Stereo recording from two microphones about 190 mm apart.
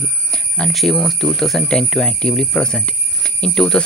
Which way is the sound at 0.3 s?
5° left (ahead or behind).